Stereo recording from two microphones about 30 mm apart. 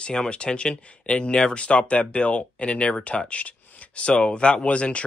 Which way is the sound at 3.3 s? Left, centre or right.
Left.